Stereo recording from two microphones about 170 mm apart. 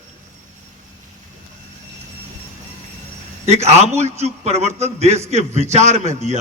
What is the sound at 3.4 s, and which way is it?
A man's voice, 40° right (ahead or behind).